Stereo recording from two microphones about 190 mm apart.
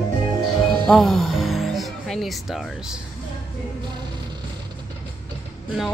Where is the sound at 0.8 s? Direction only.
Centre (ahead or behind).